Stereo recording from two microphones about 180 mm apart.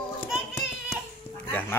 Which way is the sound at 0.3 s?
Centre (ahead or behind).